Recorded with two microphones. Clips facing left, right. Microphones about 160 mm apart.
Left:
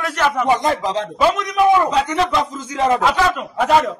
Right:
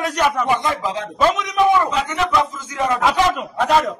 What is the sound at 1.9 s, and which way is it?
Speech, 35° left (ahead or behind).